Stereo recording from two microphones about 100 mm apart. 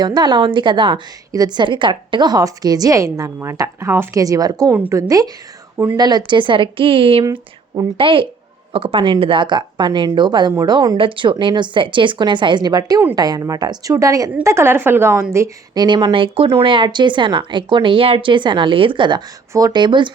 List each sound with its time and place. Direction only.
0.0 s a woman's voice: 45° right (ahead or behind); by 4.2 s 25° right (ahead or behind)
4.2 s a woman's voice: 40° right (ahead or behind)
5.7 s a woman's voice: 20° right (ahead or behind)
6.0 s a woman's voice: 45° right (ahead or behind)
10.9 s a woman's voice: 60° right (ahead or behind); by 15.4 s 25° right (ahead or behind)
15.7 s speech: 45° right (ahead or behind)